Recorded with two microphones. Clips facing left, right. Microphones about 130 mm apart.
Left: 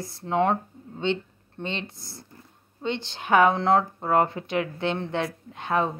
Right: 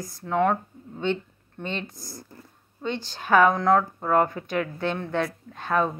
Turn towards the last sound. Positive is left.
turn(degrees=20)  # may be behind; listen again after turning